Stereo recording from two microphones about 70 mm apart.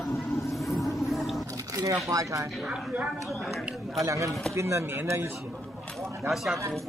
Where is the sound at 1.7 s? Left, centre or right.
Right.